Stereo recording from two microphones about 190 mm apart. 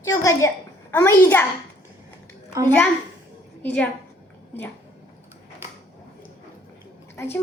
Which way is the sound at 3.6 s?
10° left (ahead or behind).